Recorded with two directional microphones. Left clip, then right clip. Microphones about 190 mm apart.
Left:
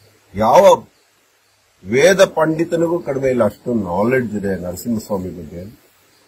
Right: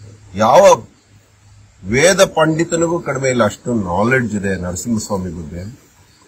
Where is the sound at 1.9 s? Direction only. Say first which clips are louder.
Even; 15° right (ahead or behind).